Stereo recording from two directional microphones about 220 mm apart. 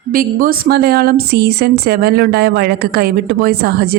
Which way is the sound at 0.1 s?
40° right (ahead or behind).